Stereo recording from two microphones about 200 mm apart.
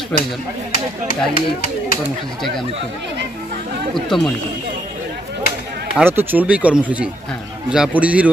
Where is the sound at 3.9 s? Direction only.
Centre (ahead or behind).